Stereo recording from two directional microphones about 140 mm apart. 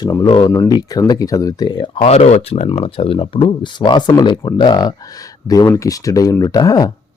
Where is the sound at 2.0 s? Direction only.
50° left (ahead or behind).